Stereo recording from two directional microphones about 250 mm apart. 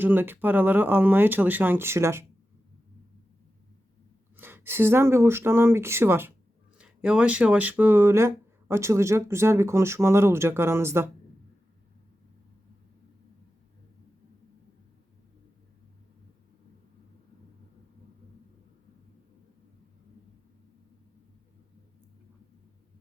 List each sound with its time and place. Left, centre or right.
0.0 s speech: centre
4.4 s speech: centre